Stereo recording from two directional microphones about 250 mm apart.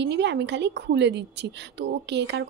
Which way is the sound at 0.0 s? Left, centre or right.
Right.